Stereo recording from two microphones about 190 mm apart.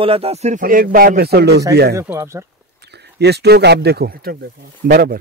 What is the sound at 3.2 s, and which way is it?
A man's voice, 60° right (ahead or behind).